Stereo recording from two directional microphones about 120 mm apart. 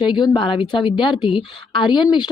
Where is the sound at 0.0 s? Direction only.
40° left (ahead or behind).